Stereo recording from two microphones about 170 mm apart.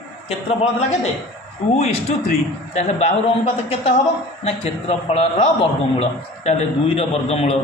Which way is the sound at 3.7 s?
40° left (ahead or behind).